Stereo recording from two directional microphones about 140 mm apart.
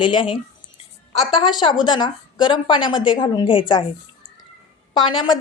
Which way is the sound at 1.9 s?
35° left (ahead or behind).